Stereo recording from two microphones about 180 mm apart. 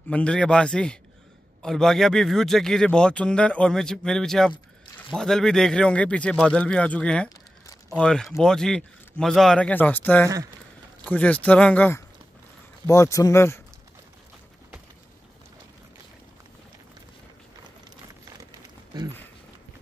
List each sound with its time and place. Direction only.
0.1 s speech: 5° left (ahead or behind)
10.2 s speech: 20° right (ahead or behind)
11.1 s speech: 10° left (ahead or behind)